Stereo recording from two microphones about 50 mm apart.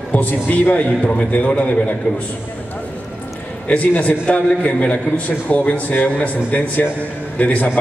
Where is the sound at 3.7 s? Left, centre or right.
Left.